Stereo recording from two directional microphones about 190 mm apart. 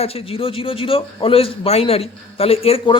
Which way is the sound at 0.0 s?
30° left (ahead or behind).